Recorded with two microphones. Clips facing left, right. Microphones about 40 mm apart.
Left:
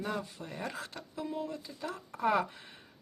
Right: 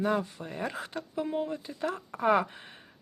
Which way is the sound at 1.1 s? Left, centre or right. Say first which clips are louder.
Right 6 dB; right.